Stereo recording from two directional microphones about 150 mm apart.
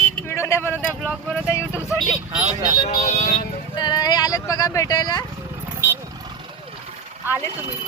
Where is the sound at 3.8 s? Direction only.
25° left (ahead or behind).